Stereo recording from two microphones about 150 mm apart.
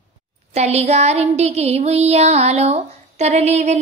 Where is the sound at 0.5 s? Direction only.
45° right (ahead or behind).